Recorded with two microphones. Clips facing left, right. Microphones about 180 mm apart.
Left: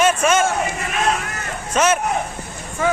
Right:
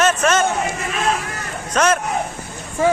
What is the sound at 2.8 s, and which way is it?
Speech, 30° right (ahead or behind).